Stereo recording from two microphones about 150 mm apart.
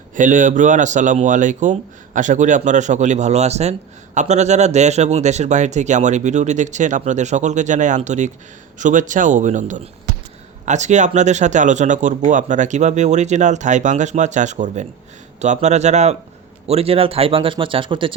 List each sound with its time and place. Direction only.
0.2 s a man's voice: 60° right (ahead or behind); by 18.1 s 35° right (ahead or behind)